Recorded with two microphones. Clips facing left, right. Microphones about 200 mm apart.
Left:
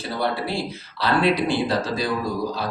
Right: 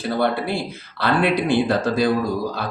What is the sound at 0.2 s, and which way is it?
A man's voice, 55° right (ahead or behind).